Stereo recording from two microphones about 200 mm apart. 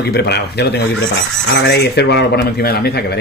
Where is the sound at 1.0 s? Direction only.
60° left (ahead or behind).